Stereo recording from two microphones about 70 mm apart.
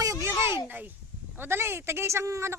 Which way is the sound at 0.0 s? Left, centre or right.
Right.